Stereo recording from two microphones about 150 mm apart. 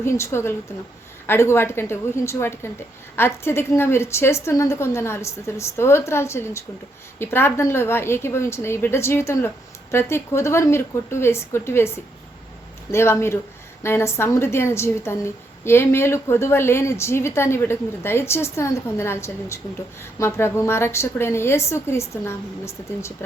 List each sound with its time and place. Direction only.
0.0 s a woman's voice: 15° left (ahead or behind)